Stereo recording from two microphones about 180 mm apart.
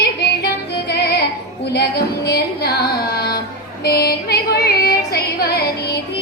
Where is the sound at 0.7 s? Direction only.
65° left (ahead or behind).